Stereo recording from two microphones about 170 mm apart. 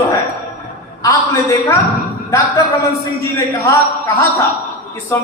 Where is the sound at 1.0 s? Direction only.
15° left (ahead or behind).